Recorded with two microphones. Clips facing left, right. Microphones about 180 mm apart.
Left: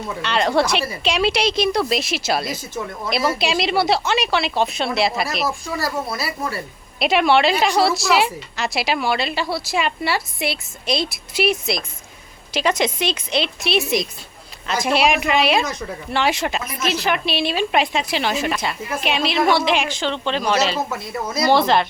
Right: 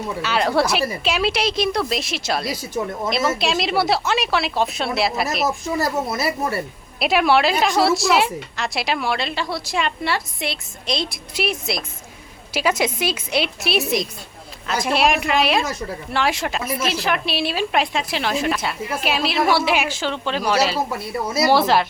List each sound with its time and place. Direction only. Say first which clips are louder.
0.2 s a woman's voice: left 1 dB; 5° right (ahead or behind)
2.8 s speech: right 5 dB; 20° right (ahead or behind)
3.1 s a woman's voice: left 2 dB; centre (ahead or behind)
5.5 s speech: right 3 dB; 20° right (ahead or behind)
7.0 s a woman's voice: left 1 dB; centre (ahead or behind)